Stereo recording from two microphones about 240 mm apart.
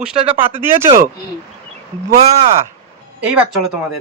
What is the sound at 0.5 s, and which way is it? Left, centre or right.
Speech, centre.